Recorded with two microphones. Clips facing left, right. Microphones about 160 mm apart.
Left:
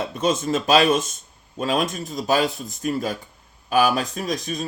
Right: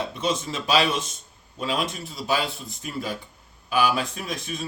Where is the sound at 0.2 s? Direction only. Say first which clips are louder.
Left 8 dB; 45° left (ahead or behind).